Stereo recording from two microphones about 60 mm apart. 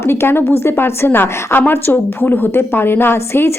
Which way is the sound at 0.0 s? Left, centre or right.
Left.